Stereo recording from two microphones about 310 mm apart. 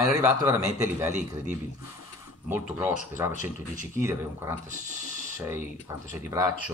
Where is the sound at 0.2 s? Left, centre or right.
Centre.